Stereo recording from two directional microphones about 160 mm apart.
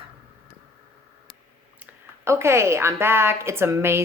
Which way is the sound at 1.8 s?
15° right (ahead or behind).